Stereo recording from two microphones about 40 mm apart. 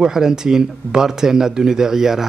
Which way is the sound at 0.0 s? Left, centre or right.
Centre.